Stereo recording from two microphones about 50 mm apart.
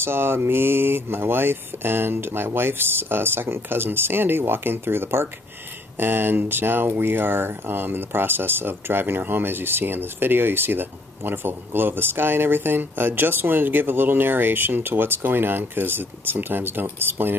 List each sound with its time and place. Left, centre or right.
0.0 s speech: right